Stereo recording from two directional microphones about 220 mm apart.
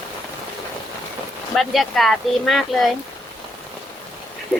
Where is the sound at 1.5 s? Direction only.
Centre (ahead or behind).